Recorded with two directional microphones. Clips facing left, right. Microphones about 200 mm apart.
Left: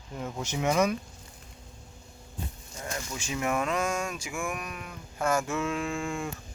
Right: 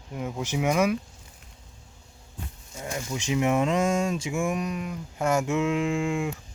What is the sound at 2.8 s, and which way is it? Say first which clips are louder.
Speech: right 4 dB; 15° right (ahead or behind).